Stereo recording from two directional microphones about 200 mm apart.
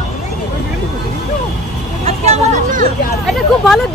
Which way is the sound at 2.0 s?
35° right (ahead or behind).